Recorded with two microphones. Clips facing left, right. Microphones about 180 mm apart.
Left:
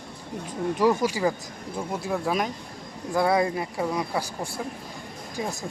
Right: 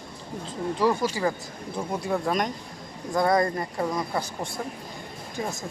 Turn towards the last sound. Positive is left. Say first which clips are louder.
# even
turn(degrees=15)  # may be behind; listen again after turning